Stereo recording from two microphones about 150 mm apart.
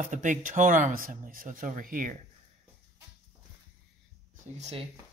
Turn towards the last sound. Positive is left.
turn(degrees=-45)  # may be behind; listen again after turning